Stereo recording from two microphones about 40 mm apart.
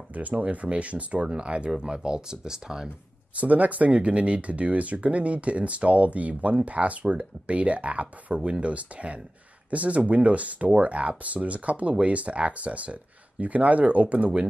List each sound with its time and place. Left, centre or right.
0.1 s speech: right; by 2.9 s centre
3.3 s speech: right